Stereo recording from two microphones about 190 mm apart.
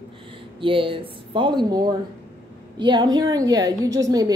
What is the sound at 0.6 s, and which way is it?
A woman's voice, 25° right (ahead or behind).